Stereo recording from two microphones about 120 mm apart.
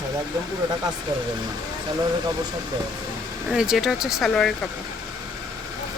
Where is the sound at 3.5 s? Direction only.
5° right (ahead or behind).